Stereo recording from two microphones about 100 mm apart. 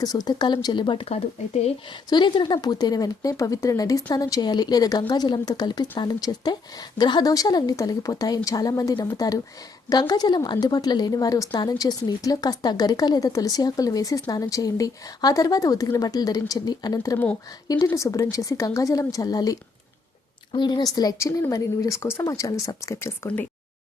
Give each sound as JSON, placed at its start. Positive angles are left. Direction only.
{"t": 0.0, "sound": "speech", "side_deg": 40}
{"t": 2.0, "sound": "speech", "side_deg": 50}
{"t": 20.5, "sound": "speech", "side_deg": 50}